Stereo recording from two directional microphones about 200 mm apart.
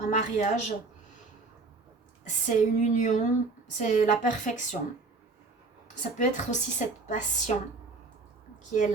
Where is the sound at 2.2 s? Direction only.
35° left (ahead or behind).